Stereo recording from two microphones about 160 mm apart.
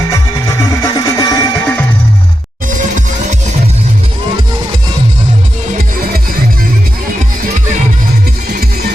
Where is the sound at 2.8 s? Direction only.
50° right (ahead or behind).